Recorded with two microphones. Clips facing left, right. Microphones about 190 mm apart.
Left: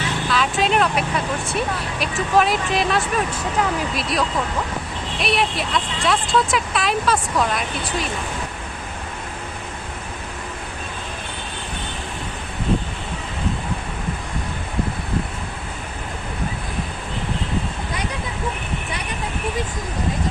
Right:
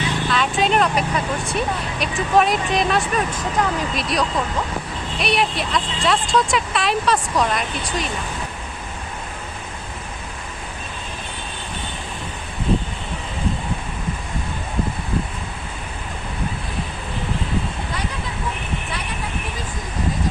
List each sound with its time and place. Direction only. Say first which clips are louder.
0.3 s speech: even; centre (ahead or behind)